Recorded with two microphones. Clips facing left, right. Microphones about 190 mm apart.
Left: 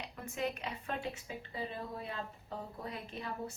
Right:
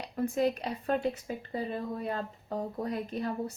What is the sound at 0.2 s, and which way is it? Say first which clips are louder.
A woman's voice: right 10 dB; 35° right (ahead or behind).